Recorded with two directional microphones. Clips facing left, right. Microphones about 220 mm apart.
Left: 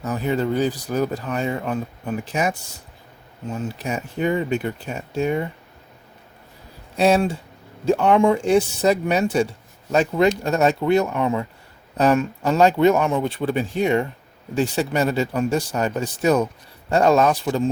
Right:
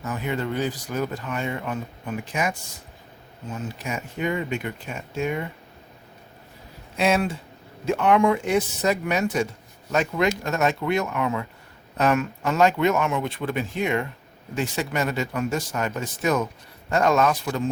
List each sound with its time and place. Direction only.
0.0 s speech: 40° left (ahead or behind)
3.5 s speech: 35° left (ahead or behind)
6.9 s speech: 35° left (ahead or behind)